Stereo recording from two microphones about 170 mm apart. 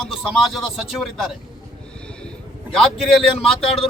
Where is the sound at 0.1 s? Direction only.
Centre (ahead or behind).